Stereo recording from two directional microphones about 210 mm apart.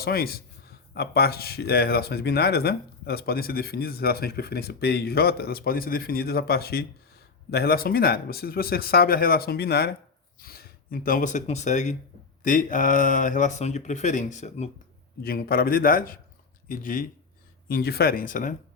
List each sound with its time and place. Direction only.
0.0 s speech: 45° left (ahead or behind)
15.2 s speech: 45° left (ahead or behind)